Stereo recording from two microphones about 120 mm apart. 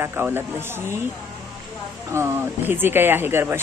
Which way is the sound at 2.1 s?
20° right (ahead or behind).